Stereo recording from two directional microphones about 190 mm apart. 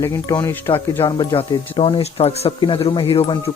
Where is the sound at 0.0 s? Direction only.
15° left (ahead or behind).